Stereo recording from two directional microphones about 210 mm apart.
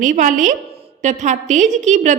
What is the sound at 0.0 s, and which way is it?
A woman's voice, 40° right (ahead or behind).